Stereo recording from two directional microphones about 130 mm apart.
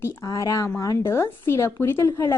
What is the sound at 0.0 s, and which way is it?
A woman's voice, 20° left (ahead or behind).